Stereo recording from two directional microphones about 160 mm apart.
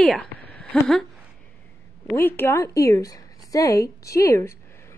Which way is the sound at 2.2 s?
15° left (ahead or behind).